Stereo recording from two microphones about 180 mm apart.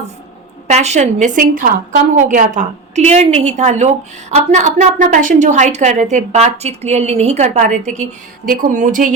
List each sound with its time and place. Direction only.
0.7 s a woman's voice: 40° right (ahead or behind)